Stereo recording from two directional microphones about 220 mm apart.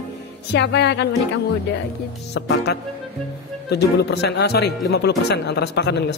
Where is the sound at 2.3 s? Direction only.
50° left (ahead or behind).